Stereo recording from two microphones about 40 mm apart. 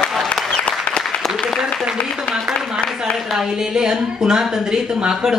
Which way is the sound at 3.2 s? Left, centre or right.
Centre.